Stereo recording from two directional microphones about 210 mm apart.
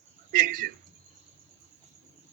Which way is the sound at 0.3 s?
40° right (ahead or behind).